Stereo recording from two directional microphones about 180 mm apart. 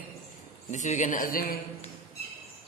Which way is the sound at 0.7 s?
40° left (ahead or behind).